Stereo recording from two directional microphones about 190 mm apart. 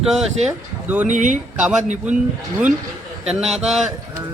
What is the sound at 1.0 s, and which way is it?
Speech, 40° right (ahead or behind).